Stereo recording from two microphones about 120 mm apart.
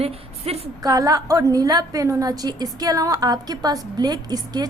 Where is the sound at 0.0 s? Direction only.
55° right (ahead or behind).